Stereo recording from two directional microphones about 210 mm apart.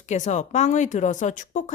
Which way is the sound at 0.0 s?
35° left (ahead or behind).